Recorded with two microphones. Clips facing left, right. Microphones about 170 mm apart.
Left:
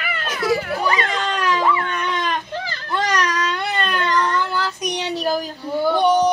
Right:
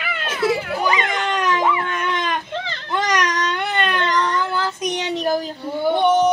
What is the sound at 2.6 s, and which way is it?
Baby cry, 25° right (ahead or behind).